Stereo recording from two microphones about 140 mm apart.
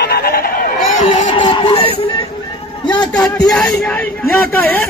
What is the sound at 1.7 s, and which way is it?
Speech, 45° left (ahead or behind).